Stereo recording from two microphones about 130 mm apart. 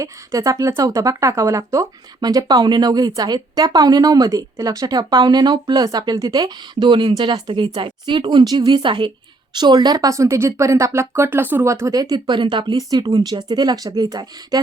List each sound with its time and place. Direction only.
0.0 s speech: 25° right (ahead or behind)